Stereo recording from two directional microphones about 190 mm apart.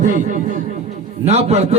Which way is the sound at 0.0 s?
40° right (ahead or behind).